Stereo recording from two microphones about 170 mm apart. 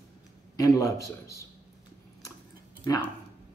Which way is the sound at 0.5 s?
20° left (ahead or behind).